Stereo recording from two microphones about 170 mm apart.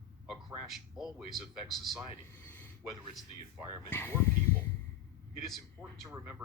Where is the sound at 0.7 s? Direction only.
Centre (ahead or behind).